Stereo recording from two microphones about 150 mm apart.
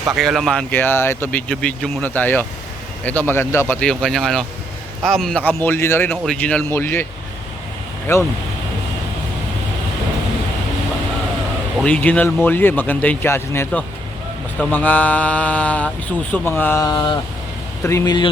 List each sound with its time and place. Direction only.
0.1 s speech: centre (ahead or behind)
0.7 s speech: 15° left (ahead or behind)
3.8 s speech: 5° left (ahead or behind)
8.1 s speech: 15° left (ahead or behind)
11.8 s speech: 10° left (ahead or behind); by 18.3 s 25° left (ahead or behind)